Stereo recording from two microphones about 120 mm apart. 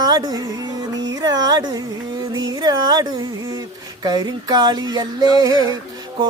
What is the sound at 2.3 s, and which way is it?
Music, 35° right (ahead or behind).